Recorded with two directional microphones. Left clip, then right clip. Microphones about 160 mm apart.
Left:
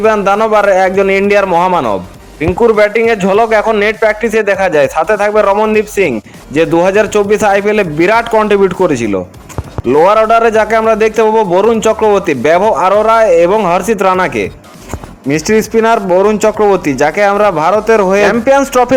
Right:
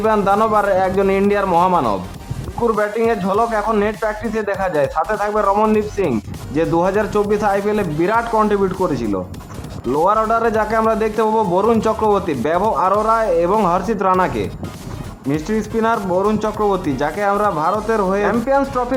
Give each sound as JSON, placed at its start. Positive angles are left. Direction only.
{"t": 0.0, "sound": "speech", "side_deg": 25}
{"t": 2.6, "sound": "speech", "side_deg": 30}
{"t": 11.3, "sound": "speech", "side_deg": 10}